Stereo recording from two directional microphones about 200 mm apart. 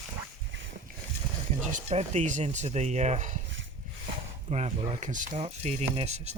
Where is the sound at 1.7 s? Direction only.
35° right (ahead or behind).